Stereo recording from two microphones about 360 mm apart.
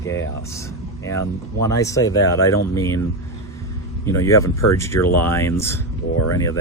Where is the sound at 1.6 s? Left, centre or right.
Centre.